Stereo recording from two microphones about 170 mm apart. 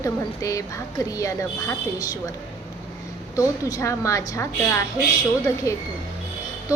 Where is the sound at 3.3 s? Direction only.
20° left (ahead or behind).